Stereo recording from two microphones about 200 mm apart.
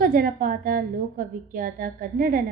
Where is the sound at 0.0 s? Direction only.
45° right (ahead or behind).